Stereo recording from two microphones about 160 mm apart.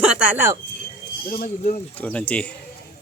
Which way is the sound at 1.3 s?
60° left (ahead or behind).